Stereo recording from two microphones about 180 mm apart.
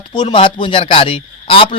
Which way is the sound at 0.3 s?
30° left (ahead or behind).